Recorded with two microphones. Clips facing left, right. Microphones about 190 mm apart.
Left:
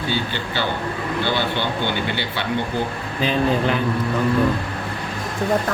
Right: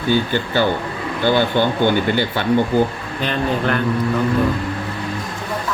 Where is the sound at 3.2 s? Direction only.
5° left (ahead or behind).